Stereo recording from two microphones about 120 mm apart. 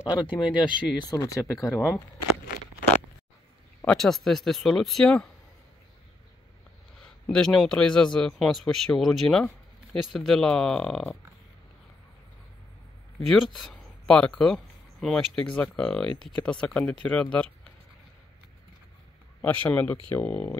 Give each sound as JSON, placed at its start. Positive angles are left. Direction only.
{"t": 0.0, "sound": "speech", "side_deg": 40}
{"t": 1.1, "sound": "speech", "side_deg": 30}
{"t": 3.8, "sound": "a man's voice", "side_deg": 5}
{"t": 7.0, "sound": "a man's voice", "side_deg": 5}
{"t": 13.3, "sound": "speech", "side_deg": 5}
{"t": 19.4, "sound": "speech", "side_deg": 15}